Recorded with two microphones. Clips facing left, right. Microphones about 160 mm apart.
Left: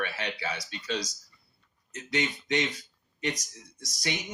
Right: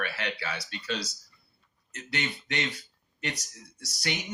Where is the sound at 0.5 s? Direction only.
30° right (ahead or behind).